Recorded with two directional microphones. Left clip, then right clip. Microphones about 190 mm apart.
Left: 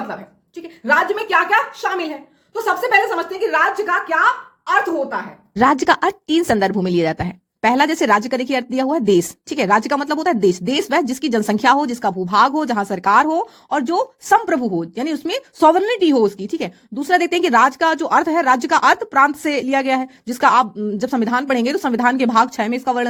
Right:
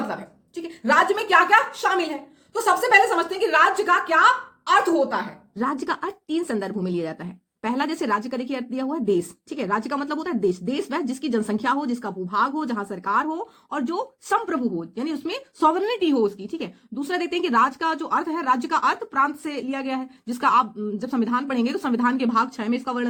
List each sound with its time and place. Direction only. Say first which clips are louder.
0.1 s a woman's voice: left 2 dB; centre (ahead or behind)
5.5 s speech: left 12 dB; 45° left (ahead or behind)